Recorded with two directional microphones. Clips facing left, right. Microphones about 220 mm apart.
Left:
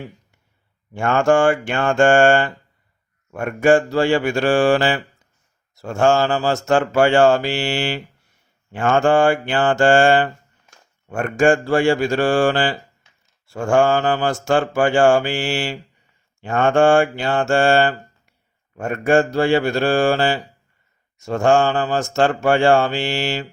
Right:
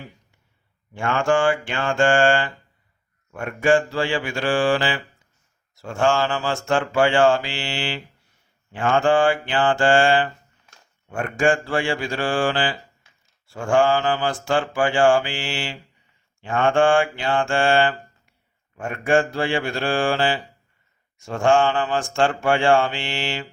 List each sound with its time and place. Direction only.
0.9 s speech: 45° left (ahead or behind)
18.8 s mantra: 40° left (ahead or behind)